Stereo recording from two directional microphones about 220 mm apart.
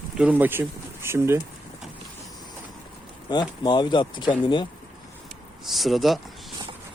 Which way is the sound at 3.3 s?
20° left (ahead or behind).